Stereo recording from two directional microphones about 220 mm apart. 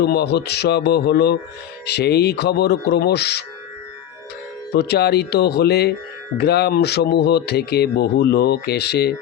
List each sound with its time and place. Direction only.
0.0 s speech: 50° left (ahead or behind)
4.7 s speech: 45° left (ahead or behind)